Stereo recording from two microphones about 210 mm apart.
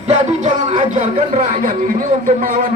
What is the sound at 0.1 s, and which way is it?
Speech, 35° right (ahead or behind).